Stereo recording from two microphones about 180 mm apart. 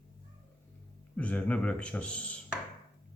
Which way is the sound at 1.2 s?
10° left (ahead or behind).